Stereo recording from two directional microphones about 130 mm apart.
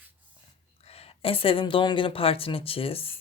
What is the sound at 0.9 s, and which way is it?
A woman's voice, 50° left (ahead or behind).